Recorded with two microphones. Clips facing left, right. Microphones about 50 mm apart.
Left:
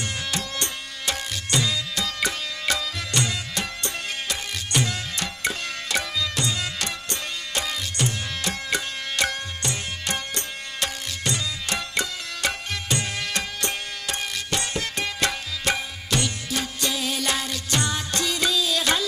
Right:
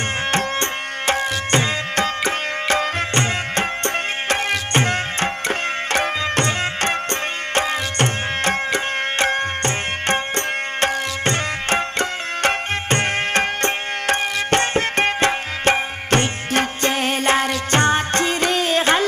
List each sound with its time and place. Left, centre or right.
0.3 s music: right